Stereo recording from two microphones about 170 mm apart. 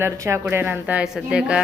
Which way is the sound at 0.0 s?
15° right (ahead or behind).